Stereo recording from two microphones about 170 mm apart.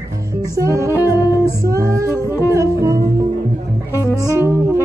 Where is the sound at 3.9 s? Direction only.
15° left (ahead or behind).